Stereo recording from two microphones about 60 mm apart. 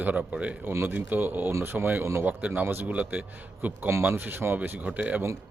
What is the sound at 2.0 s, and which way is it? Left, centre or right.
Speech, right.